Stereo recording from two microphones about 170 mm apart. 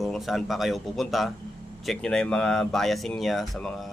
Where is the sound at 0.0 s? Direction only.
Centre (ahead or behind).